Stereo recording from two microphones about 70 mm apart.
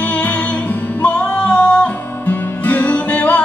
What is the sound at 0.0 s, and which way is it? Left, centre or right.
Music, left.